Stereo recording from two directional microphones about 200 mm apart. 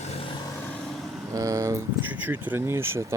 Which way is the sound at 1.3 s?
15° right (ahead or behind).